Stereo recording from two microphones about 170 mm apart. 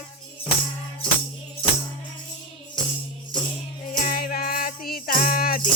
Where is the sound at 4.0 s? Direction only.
60° left (ahead or behind).